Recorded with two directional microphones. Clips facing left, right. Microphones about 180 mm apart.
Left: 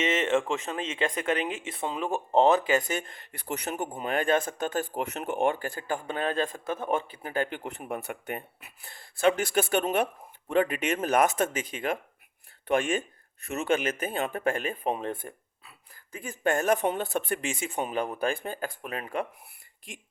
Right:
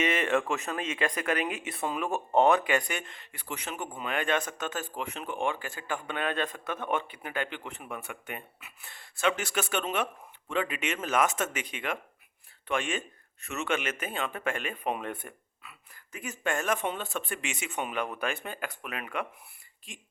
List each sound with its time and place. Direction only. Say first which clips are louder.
0.0 s speech: left 2 dB; 25° left (ahead or behind)
3.1 s speech: left 5 dB; 40° left (ahead or behind)
4.8 s speech: left 5 dB; 45° left (ahead or behind)
13.4 s speech: left 4 dB; 35° left (ahead or behind)